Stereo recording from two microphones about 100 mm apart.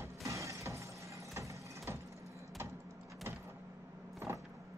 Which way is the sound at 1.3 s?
30° right (ahead or behind).